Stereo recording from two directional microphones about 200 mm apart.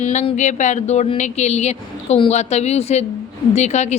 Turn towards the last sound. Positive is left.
turn(degrees=35)  # may be behind; listen again after turning